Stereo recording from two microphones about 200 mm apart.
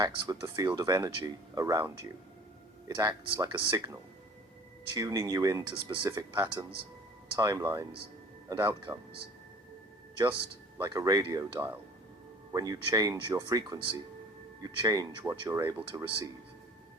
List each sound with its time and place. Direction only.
0.0 s speech: 20° right (ahead or behind)
4.9 s speech: 20° right (ahead or behind)
10.8 s speech: 20° right (ahead or behind)